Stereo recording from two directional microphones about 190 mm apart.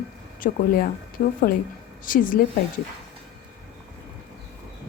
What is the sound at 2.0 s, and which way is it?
Speech, 45° left (ahead or behind).